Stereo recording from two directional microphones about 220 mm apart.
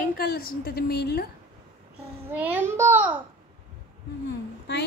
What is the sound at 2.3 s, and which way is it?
Speech, 10° right (ahead or behind).